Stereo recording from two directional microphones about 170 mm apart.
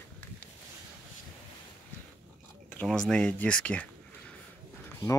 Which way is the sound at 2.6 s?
5° left (ahead or behind).